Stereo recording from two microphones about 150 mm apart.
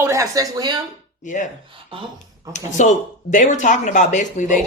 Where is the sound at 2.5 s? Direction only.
55° left (ahead or behind).